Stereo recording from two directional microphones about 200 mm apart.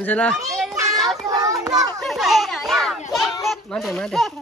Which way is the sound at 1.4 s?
15° right (ahead or behind).